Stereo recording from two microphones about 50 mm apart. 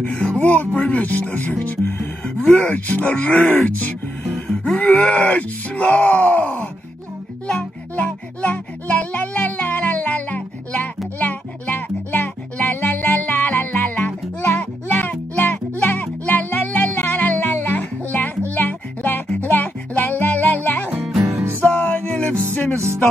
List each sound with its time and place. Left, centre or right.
0.0 s speech: left
7.9 s music: left